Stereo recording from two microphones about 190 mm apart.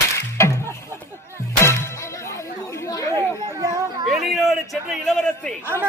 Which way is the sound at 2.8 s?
20° left (ahead or behind).